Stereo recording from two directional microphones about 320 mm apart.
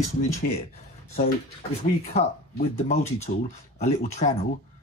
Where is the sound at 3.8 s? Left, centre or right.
Left.